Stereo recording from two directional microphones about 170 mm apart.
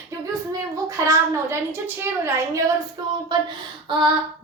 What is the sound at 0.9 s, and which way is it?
A woman's voice, 15° right (ahead or behind).